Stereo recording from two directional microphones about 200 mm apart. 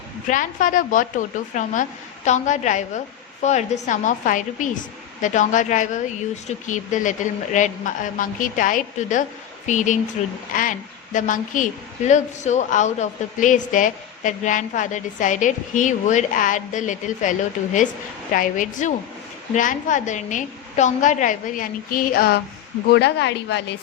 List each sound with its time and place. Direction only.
0.3 s a woman's voice: 40° left (ahead or behind)
18.3 s a woman's voice: 40° left (ahead or behind); by 23.7 s 60° left (ahead or behind)